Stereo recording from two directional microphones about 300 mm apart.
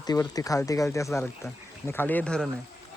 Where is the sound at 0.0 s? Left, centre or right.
Centre.